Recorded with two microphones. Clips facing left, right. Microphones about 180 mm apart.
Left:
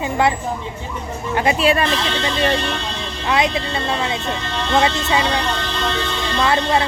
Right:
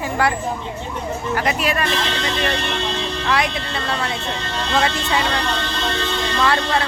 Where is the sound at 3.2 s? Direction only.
20° left (ahead or behind).